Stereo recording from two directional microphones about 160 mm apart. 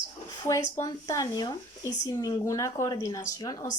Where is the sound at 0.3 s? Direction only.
20° left (ahead or behind).